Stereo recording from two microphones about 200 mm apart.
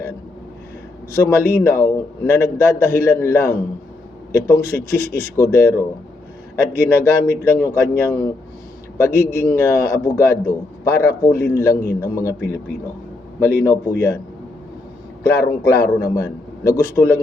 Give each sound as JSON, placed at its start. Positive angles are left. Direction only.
{"t": 1.1, "sound": "a man's voice", "side_deg": 15}
{"t": 13.4, "sound": "a man's voice", "side_deg": 10}
{"t": 15.2, "sound": "a man's voice", "side_deg": 15}